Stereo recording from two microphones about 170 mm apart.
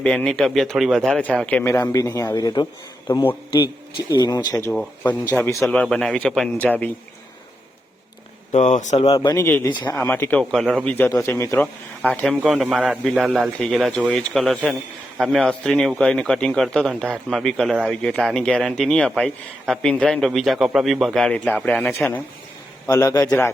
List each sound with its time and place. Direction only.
0.0 s a man's voice: 5° left (ahead or behind); by 4.7 s 20° left (ahead or behind)
4.7 s a man's voice: 5° left (ahead or behind)
5.3 s speech: 15° left (ahead or behind)
5.6 s a man's voice: 5° left (ahead or behind)
8.5 s speech: 45° left (ahead or behind)
9.0 s speech: 25° left (ahead or behind)
9.7 s a man's voice: 25° left (ahead or behind)
10.0 s speech: 10° left (ahead or behind)
10.9 s a man's voice: 15° left (ahead or behind)